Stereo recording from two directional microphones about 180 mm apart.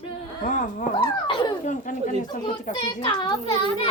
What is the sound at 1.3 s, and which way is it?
Speech, 25° left (ahead or behind).